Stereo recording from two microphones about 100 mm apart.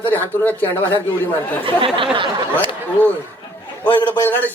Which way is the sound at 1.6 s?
60° right (ahead or behind).